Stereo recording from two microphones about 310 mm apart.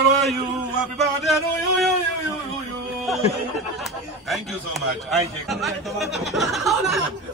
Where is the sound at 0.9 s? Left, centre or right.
Centre.